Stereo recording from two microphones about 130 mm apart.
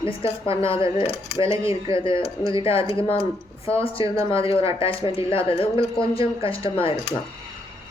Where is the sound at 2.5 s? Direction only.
45° left (ahead or behind).